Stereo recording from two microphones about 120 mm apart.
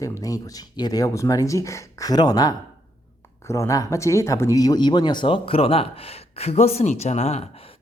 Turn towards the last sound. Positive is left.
turn(degrees=55)  # may be behind; listen again after turning